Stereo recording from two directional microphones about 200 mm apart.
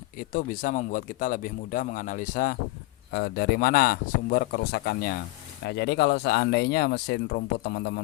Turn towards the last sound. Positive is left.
turn(degrees=55)  # may be behind; listen again after turning